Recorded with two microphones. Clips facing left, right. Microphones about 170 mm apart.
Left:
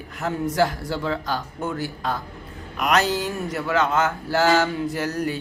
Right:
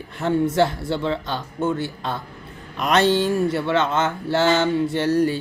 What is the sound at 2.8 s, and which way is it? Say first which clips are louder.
Mantra: right 3 dB; 30° right (ahead or behind).